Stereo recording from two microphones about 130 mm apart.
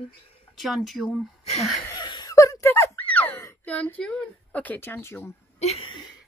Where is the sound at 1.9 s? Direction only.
35° left (ahead or behind); by 3.4 s 10° left (ahead or behind).